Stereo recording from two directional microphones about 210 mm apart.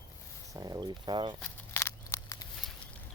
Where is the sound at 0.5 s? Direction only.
20° right (ahead or behind).